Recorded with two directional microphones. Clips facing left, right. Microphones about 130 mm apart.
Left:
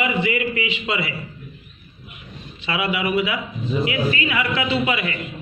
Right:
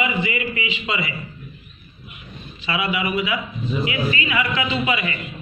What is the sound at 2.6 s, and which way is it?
A man's voice, 60° left (ahead or behind).